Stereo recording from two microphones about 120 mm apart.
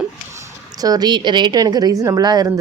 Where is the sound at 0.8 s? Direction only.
35° right (ahead or behind).